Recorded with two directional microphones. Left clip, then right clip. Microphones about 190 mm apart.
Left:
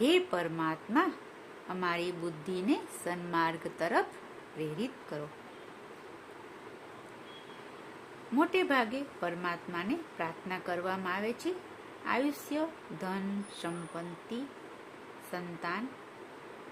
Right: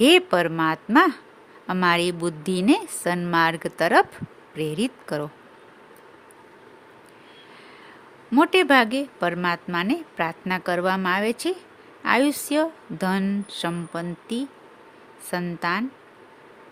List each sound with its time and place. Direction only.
0.0 s a woman's voice: 55° right (ahead or behind)
8.4 s a woman's voice: 60° right (ahead or behind)